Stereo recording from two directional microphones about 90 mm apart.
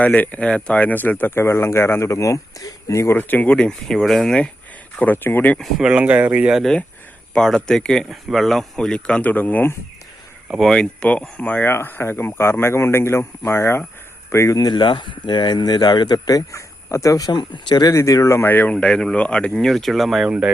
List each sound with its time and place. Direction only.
0.0 s speech: 15° left (ahead or behind); by 3.2 s 35° left (ahead or behind)
3.2 s speech: 20° left (ahead or behind)
4.9 s speech: 20° left (ahead or behind)
5.8 s speech: 10° right (ahead or behind)
7.3 s speech: 5° left (ahead or behind)
10.6 s speech: 5° left (ahead or behind); by 17.8 s 55° left (ahead or behind)
17.8 s speech: 35° left (ahead or behind)
18.7 s speech: 10° left (ahead or behind); by 20.5 s 10° right (ahead or behind)